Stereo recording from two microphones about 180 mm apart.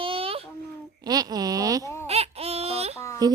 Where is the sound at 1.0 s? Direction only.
20° right (ahead or behind).